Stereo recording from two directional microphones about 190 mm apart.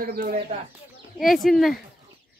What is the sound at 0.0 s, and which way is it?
Speech, 50° right (ahead or behind).